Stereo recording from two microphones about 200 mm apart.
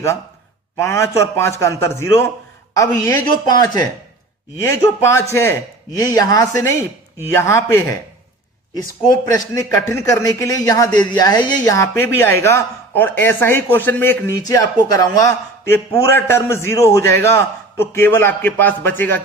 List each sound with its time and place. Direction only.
0.7 s speech: 15° left (ahead or behind)
9.3 s speech: 15° left (ahead or behind)